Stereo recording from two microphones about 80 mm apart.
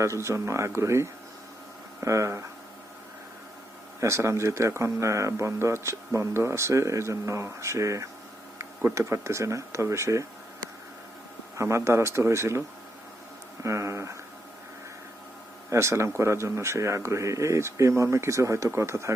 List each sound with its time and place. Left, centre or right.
0.0 s speech: right
4.0 s speech: right
11.5 s speech: right
15.7 s speech: right